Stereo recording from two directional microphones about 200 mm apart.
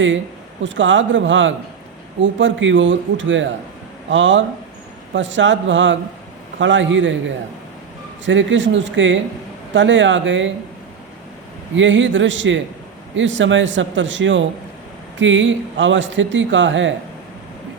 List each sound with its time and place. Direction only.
0.6 s speech: 70° right (ahead or behind)
8.2 s speech: 65° right (ahead or behind)
11.8 s speech: 70° right (ahead or behind)